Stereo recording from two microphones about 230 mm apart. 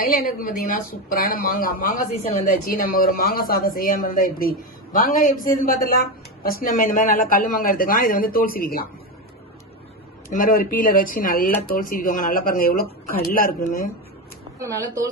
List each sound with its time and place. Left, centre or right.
0.0 s a woman's voice: left
10.2 s a woman's voice: left
14.6 s speech: centre